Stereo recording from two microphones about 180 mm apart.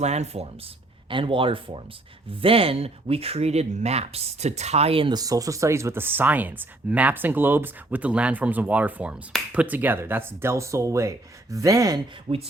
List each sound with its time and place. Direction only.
0.0 s speech: 40° right (ahead or behind); by 11.9 s 20° right (ahead or behind)
12.3 s speech: 30° right (ahead or behind)